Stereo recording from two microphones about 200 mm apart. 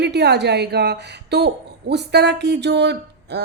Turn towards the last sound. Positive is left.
turn(degrees=-55)  # may be behind; listen again after turning